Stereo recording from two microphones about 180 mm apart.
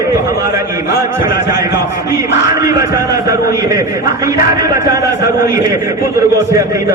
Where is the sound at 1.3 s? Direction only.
20° right (ahead or behind).